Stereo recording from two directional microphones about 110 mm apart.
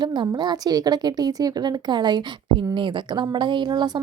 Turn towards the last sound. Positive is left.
turn(degrees=-40)  # may be behind; listen again after turning